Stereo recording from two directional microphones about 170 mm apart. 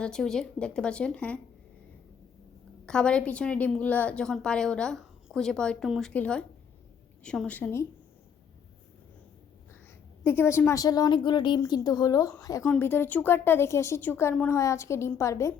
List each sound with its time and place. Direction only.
0.0 s a woman's voice: 5° left (ahead or behind)
2.8 s a woman's voice: 5° left (ahead or behind)
10.2 s a woman's voice: 15° left (ahead or behind)